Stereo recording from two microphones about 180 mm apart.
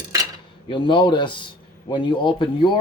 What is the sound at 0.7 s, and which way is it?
Speech, 25° left (ahead or behind).